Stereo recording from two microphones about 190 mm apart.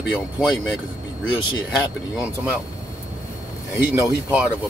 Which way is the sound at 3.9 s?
15° right (ahead or behind).